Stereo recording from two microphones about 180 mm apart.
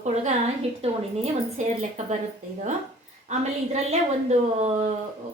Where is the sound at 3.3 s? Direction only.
40° right (ahead or behind).